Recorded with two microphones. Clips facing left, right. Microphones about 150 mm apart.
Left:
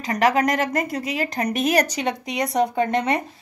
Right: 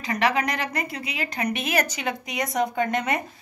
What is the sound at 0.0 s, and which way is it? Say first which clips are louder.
A woman's voice: left 4 dB; 40° left (ahead or behind).